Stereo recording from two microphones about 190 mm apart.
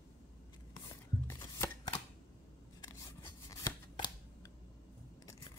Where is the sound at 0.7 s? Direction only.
20° left (ahead or behind).